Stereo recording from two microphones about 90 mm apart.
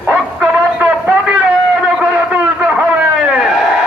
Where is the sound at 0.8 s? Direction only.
15° right (ahead or behind).